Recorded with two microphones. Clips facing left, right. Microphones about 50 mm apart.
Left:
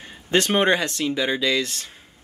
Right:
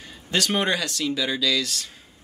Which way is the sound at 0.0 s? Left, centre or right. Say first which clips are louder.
Left 4 dB; left.